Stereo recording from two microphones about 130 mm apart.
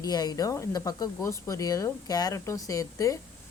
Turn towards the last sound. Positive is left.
turn(degrees=25)  # may be behind; listen again after turning